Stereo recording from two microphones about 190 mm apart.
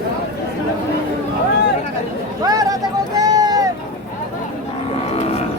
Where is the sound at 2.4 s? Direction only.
20° right (ahead or behind).